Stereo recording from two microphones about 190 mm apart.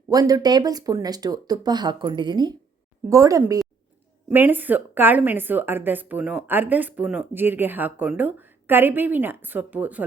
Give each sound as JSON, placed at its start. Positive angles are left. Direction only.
{"t": 0.1, "sound": "a woman's voice", "side_deg": -20}